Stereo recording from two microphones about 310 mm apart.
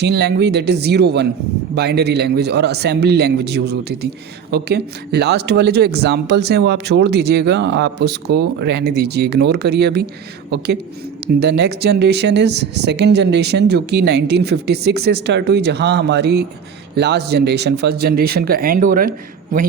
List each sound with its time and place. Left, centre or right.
0.0 s speech: right